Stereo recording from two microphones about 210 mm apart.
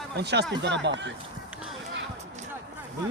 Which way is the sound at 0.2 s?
55° right (ahead or behind).